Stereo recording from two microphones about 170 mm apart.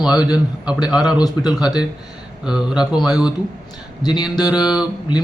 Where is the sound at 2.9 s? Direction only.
25° left (ahead or behind).